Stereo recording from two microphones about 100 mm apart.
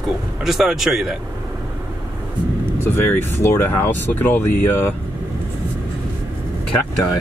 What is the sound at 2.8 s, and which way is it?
Speech, 20° left (ahead or behind).